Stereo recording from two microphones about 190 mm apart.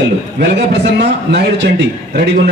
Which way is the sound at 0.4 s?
65° right (ahead or behind).